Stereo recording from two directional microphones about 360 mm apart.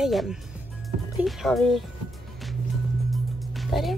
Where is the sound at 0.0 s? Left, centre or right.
Centre.